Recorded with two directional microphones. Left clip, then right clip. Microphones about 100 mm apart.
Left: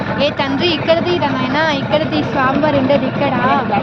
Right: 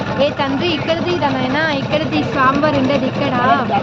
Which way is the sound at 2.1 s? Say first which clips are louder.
Right 1 dB; 35° right (ahead or behind).